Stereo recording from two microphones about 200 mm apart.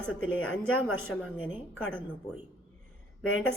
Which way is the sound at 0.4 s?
5° left (ahead or behind).